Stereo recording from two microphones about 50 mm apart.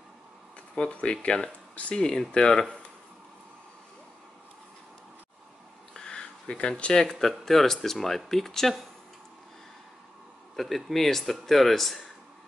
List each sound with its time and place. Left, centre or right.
0.7 s speech: left
5.9 s a sound: centre
6.8 s a man's voice: centre
10.5 s a man's voice: centre